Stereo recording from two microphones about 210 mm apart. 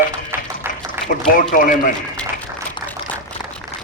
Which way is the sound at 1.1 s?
40° left (ahead or behind).